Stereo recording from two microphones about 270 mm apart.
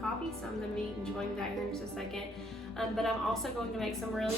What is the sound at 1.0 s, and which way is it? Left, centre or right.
A woman's voice, centre.